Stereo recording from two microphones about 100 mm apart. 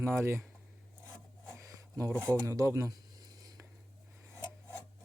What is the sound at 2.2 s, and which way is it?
Speech, 30° right (ahead or behind).